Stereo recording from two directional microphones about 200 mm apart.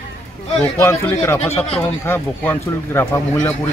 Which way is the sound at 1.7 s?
10° left (ahead or behind).